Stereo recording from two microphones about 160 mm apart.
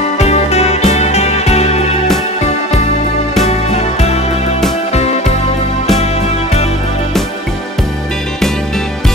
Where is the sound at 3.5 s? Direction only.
40° left (ahead or behind).